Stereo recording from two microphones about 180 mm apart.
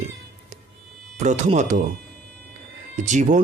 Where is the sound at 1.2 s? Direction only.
40° right (ahead or behind).